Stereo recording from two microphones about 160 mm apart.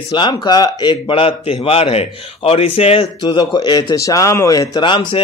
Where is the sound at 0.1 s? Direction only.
30° left (ahead or behind).